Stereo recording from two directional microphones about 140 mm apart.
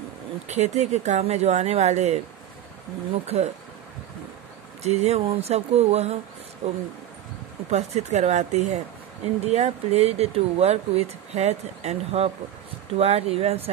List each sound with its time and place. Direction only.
0.5 s speech: 55° right (ahead or behind)
3.3 s speech: 50° right (ahead or behind)
4.8 s speech: 50° right (ahead or behind)
7.7 s speech: 55° right (ahead or behind)